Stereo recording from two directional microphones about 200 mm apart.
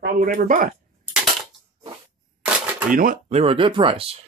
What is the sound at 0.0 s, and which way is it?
Speech, 45° right (ahead or behind).